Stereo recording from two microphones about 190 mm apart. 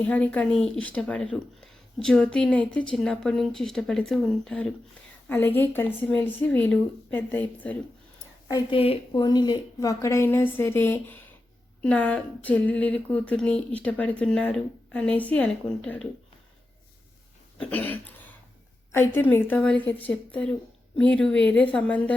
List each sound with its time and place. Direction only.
0.0 s a woman's voice: 10° left (ahead or behind)
8.4 s a woman's voice: 25° left (ahead or behind); by 16.0 s 5° left (ahead or behind)
17.6 s a sound: 10° left (ahead or behind)
18.9 s a woman's voice: 10° left (ahead or behind)